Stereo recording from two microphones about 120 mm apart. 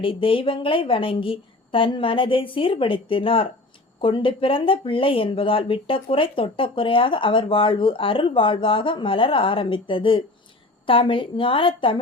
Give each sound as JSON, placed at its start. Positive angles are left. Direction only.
{"t": 0.0, "sound": "speech", "side_deg": 50}